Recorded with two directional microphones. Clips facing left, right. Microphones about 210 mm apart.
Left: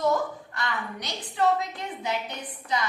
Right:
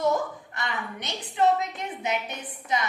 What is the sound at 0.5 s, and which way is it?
A woman's voice, 20° right (ahead or behind).